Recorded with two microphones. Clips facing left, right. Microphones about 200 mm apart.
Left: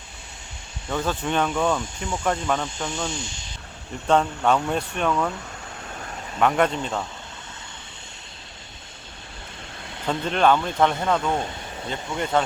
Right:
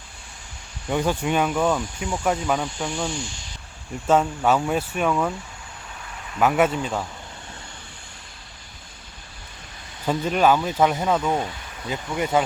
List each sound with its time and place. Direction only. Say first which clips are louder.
0.9 s speech: right 3 dB; 15° right (ahead or behind)
2.6 s speech: right 2 dB; 20° left (ahead or behind)
4.0 s speech: right 1 dB; 5° right (ahead or behind)
6.4 s speech: right 1 dB; 5° right (ahead or behind)
10.1 s speech: right 1 dB; 5° right (ahead or behind)